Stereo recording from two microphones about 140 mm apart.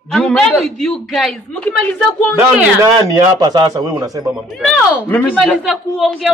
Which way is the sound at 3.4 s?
30° right (ahead or behind).